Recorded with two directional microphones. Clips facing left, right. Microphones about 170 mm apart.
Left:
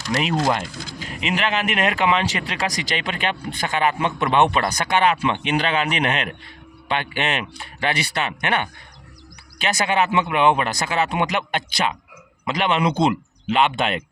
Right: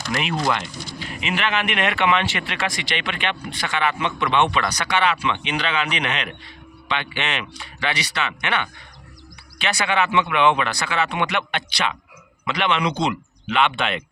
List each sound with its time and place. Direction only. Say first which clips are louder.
0.1 s speech: left 2 dB; 35° left (ahead or behind)